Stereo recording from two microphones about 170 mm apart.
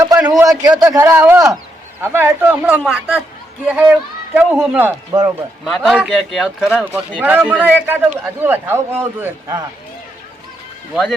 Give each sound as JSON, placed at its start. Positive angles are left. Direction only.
{"t": 0.0, "sound": "a sound", "side_deg": -10}
{"t": 0.3, "sound": "a man's voice", "side_deg": -20}
{"t": 5.6, "sound": "a man's voice", "side_deg": 0}